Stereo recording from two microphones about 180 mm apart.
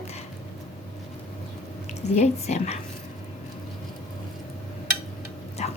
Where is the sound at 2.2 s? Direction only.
35° left (ahead or behind).